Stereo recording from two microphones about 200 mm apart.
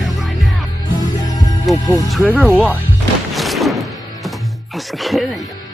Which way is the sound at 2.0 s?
5° left (ahead or behind).